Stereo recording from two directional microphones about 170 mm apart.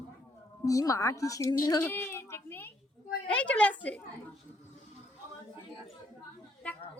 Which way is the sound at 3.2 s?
5° left (ahead or behind).